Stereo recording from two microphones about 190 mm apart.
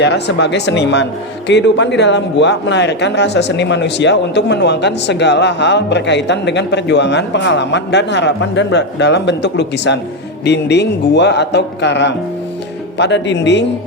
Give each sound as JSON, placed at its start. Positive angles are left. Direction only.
{"t": 0.0, "sound": "a man's voice", "side_deg": 65}